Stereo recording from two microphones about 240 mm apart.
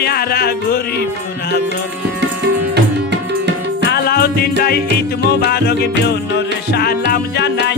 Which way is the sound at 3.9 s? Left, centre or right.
Left.